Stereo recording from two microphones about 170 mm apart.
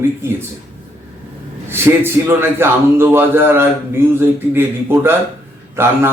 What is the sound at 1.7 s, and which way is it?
A man's voice, 15° right (ahead or behind).